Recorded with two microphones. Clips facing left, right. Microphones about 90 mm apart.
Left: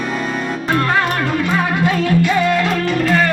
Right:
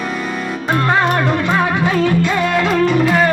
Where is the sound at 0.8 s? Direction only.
20° right (ahead or behind).